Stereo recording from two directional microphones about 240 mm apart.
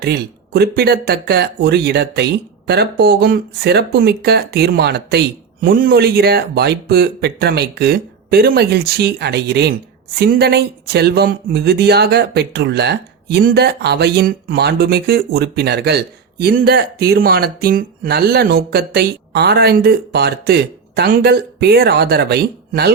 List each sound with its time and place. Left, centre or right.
0.0 s speech: right